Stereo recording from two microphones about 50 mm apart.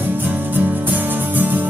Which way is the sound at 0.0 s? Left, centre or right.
Right.